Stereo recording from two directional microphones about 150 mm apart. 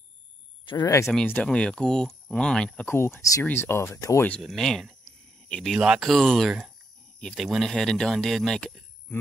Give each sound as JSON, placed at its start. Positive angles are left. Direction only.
{"t": 0.7, "sound": "speech", "side_deg": 25}
{"t": 1.2, "sound": "speech", "side_deg": 10}
{"t": 2.9, "sound": "speech", "side_deg": 15}
{"t": 4.3, "sound": "speech", "side_deg": 0}